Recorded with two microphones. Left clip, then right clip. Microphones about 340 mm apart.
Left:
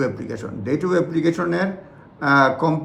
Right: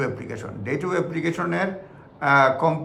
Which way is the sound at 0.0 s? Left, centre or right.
Centre.